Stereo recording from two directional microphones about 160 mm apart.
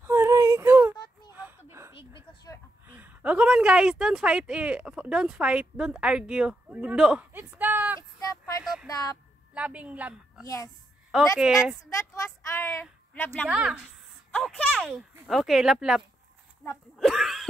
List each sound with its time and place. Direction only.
0.0 s a sound: 15° right (ahead or behind)
2.9 s speech: 10° right (ahead or behind)
8.2 s a sound: 25° left (ahead or behind)
8.8 s speech: 25° left (ahead or behind)
9.5 s a woman's voice: 10° right (ahead or behind)
10.4 s speech: 20° left (ahead or behind)
11.3 s speech: 5° right (ahead or behind)
11.9 s a woman's voice: 20° left (ahead or behind)
13.5 s speech: 5° right (ahead or behind)
14.3 s speech: 10° left (ahead or behind)
17.0 s throat clearing: centre (ahead or behind)